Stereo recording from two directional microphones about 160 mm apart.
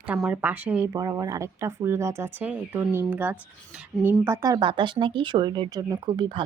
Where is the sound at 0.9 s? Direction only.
20° right (ahead or behind).